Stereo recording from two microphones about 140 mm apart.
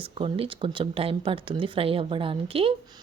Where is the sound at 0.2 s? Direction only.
40° right (ahead or behind).